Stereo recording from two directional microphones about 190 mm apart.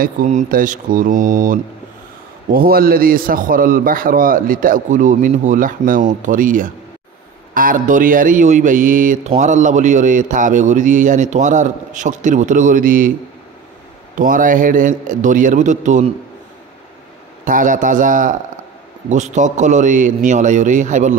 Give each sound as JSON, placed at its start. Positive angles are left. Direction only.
{"t": 0.0, "sound": "a man's voice", "side_deg": -40}
{"t": 14.1, "sound": "a man's voice", "side_deg": -45}
{"t": 17.5, "sound": "a man's voice", "side_deg": -45}